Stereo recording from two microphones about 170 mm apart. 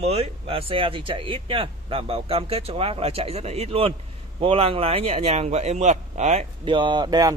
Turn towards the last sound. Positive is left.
turn(degrees=-20)  # may be behind; listen again after turning